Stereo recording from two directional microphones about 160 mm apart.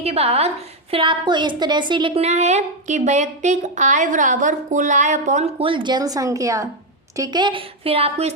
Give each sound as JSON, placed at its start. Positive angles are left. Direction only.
{"t": 0.0, "sound": "a woman's voice", "side_deg": -40}